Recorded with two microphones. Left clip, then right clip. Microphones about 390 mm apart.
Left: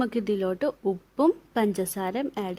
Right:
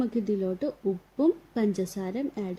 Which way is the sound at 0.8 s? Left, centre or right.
Left.